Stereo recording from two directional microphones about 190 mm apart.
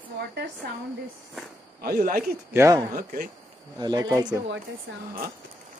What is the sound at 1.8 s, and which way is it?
Speech, 50° right (ahead or behind).